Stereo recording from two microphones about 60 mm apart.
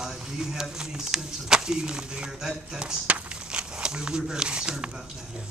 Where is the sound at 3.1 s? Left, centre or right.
Right.